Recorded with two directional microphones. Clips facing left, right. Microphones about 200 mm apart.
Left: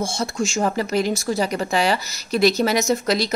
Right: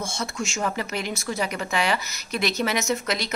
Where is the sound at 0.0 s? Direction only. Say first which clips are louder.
Left 6 dB; 30° left (ahead or behind).